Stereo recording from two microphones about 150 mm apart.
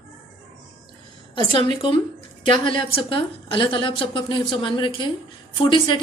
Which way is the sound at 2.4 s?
35° left (ahead or behind).